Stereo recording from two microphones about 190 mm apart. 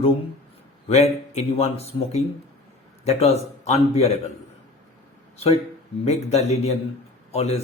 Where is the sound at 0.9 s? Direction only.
35° left (ahead or behind).